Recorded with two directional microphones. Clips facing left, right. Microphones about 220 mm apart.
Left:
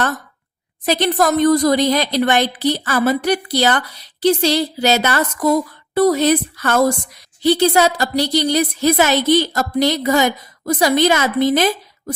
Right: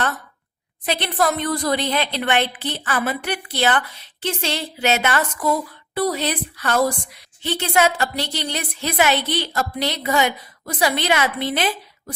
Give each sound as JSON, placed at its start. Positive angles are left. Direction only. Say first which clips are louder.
{"t": 0.9, "sound": "a woman's voice", "louder": "left 5 dB", "side_deg": 40}